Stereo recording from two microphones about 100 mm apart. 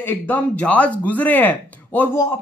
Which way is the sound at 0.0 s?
20° left (ahead or behind).